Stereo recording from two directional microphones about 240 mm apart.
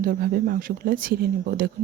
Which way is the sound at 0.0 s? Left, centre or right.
Right.